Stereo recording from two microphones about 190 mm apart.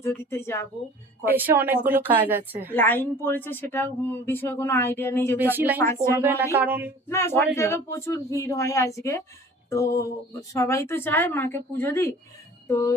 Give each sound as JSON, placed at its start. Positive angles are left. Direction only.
{"t": 0.0, "sound": "speech", "side_deg": 15}
{"t": 1.2, "sound": "a woman's voice", "side_deg": -10}
{"t": 2.7, "sound": "speech", "side_deg": 10}
{"t": 5.4, "sound": "a woman's voice", "side_deg": -10}
{"t": 5.8, "sound": "speech", "side_deg": 15}
{"t": 6.2, "sound": "a woman's voice", "side_deg": -10}
{"t": 7.1, "sound": "speech", "side_deg": 15}
{"t": 9.6, "sound": "a sound", "side_deg": 15}
{"t": 10.5, "sound": "speech", "side_deg": 15}
{"t": 12.6, "sound": "music", "side_deg": 15}